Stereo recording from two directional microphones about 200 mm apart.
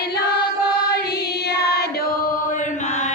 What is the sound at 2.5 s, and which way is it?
Chant, 35° left (ahead or behind).